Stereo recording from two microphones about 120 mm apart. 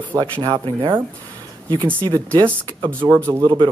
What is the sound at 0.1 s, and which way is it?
Speech, 40° right (ahead or behind).